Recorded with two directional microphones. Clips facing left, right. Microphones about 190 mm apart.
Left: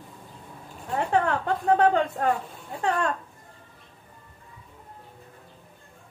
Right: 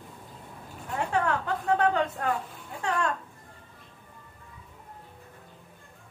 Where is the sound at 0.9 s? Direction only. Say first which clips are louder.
Left 3 dB; 35° left (ahead or behind).